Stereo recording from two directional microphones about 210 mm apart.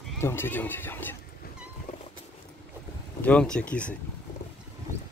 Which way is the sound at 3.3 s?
5° left (ahead or behind).